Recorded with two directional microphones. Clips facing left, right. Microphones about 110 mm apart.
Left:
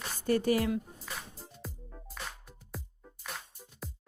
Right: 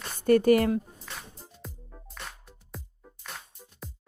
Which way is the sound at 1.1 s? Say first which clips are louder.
Even; 5° left (ahead or behind).